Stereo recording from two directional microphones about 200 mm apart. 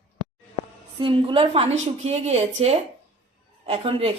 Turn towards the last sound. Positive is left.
turn(degrees=-25)  # may be behind; listen again after turning